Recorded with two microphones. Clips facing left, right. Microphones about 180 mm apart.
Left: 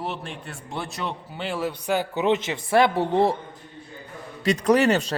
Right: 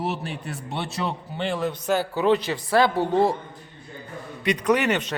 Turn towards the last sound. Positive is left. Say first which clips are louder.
# left 3 dB
turn(degrees=35)  # may be behind; listen again after turning